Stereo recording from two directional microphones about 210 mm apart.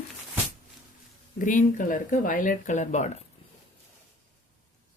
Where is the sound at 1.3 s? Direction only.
40° left (ahead or behind).